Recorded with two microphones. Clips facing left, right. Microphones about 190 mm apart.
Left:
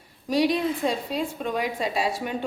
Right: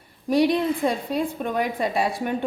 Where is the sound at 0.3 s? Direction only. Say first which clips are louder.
Right 3 dB; 55° right (ahead or behind).